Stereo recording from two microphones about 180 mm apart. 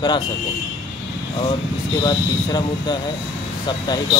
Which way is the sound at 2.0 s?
25° left (ahead or behind).